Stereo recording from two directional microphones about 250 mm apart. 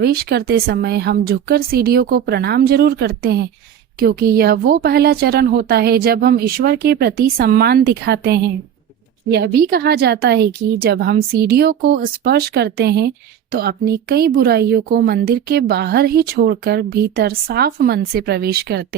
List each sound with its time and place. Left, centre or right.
0.0 s speech: right